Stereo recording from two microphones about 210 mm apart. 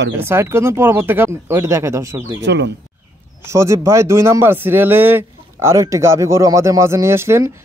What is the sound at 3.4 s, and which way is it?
Speech, 15° right (ahead or behind).